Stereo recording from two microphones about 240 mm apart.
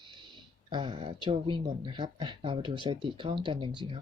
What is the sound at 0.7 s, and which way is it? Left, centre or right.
Speech, right.